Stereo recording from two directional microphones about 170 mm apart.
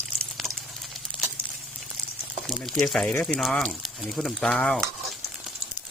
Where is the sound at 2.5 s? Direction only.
Centre (ahead or behind).